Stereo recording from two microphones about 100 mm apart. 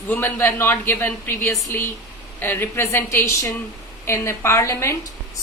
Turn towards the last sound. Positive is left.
turn(degrees=30)  # may be behind; listen again after turning